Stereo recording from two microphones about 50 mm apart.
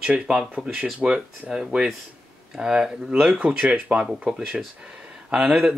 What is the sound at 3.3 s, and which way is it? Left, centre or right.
Speech, right.